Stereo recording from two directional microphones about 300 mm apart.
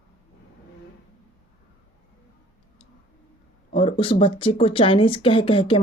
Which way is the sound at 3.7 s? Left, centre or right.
Centre.